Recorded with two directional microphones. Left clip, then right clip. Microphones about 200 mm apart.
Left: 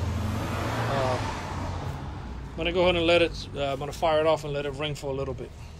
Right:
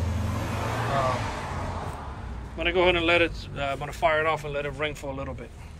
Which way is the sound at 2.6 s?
20° left (ahead or behind).